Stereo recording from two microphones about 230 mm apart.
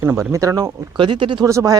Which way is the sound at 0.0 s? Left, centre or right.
Centre.